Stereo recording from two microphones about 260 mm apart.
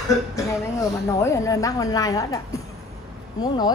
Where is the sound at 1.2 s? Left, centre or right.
Centre.